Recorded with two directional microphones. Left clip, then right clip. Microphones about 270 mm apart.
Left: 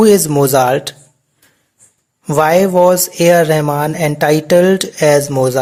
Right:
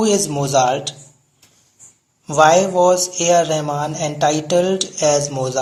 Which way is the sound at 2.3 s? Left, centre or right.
Left.